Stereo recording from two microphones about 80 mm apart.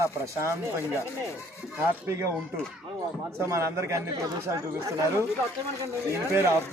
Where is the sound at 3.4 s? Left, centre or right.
Right.